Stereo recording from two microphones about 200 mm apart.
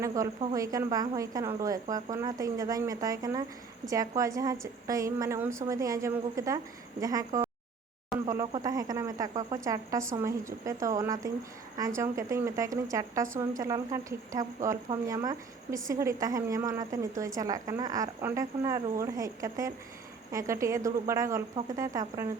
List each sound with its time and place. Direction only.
0.0 s a woman's voice: 15° right (ahead or behind)